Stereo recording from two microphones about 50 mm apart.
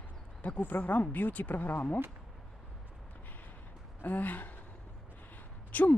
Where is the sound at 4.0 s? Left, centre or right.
Left.